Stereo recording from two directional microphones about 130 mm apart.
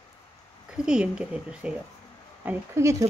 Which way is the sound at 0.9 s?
5° right (ahead or behind).